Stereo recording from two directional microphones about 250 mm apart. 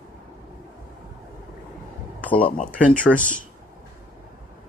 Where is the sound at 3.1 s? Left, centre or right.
Left.